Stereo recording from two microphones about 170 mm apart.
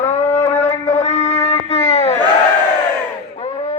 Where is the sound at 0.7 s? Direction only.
45° left (ahead or behind).